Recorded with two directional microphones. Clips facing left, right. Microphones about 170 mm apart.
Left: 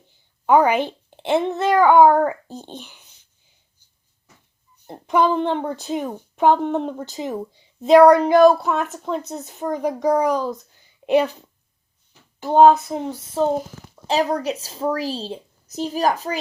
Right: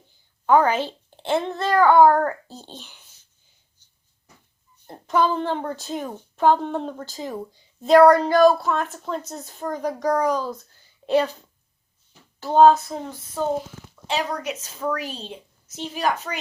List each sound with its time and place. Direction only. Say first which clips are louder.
0.4 s a child's voice: left 2 dB; 15° left (ahead or behind)
4.9 s a child's voice: left 3 dB; 20° left (ahead or behind)
5.8 s speech: left 4 dB; centre (ahead or behind)
6.1 s a child's voice: left 1 dB; 15° left (ahead or behind)
8.5 s a child's voice: left 2 dB; centre (ahead or behind); by 11.3 s 20° left (ahead or behind)
12.4 s a child's voice: left 2 dB; 15° left (ahead or behind)
12.9 s a sound: left 5 dB; 25° left (ahead or behind)
14.1 s a woman's voice: left 6 dB; 40° left (ahead or behind)